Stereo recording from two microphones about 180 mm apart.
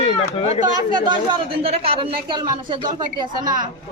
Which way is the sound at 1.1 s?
30° right (ahead or behind).